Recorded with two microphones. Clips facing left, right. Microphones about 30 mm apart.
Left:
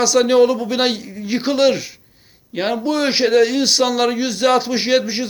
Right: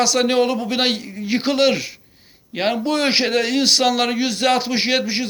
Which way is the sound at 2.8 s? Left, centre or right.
Right.